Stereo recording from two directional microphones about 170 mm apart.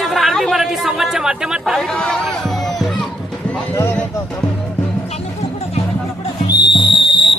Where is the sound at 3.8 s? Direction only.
10° left (ahead or behind).